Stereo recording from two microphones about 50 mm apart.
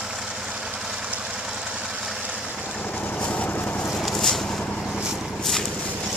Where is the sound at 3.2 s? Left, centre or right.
Left.